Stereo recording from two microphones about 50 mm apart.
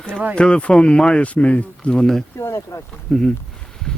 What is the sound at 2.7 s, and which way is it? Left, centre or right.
Speech, left.